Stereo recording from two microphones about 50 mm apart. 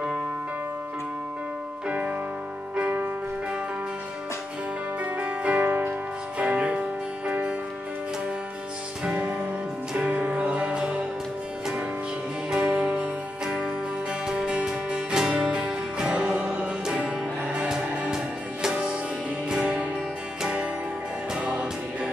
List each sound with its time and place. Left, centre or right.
1.9 s music: right
5.1 s music: right
9.0 s music: right
12.4 s music: centre
14.2 s music: centre